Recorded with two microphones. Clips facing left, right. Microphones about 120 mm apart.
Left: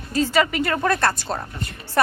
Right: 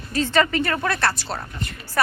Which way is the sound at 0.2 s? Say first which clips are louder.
Even; 10° left (ahead or behind).